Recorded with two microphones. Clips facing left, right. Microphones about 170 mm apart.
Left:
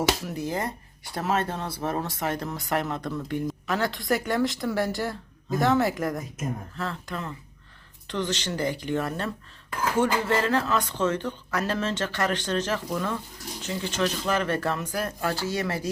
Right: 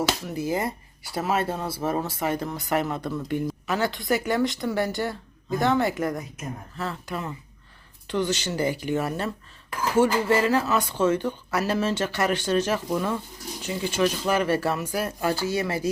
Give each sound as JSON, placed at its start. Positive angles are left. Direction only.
{"t": 0.3, "sound": "speech", "side_deg": -5}